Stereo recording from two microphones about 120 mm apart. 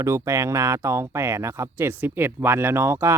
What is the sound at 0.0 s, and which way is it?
Speech, 25° right (ahead or behind).